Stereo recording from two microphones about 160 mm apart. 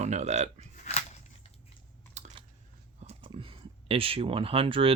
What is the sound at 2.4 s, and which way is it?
Biting, 30° right (ahead or behind).